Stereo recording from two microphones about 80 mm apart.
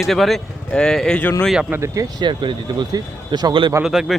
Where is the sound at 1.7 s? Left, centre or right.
Right.